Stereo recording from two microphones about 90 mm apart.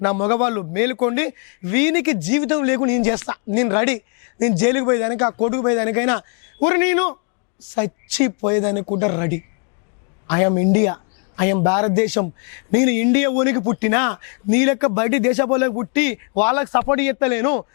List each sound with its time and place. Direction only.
0.0 s a man's voice: 15° left (ahead or behind)